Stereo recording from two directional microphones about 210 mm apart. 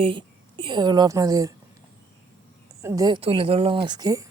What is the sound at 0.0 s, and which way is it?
A woman's voice, 25° right (ahead or behind).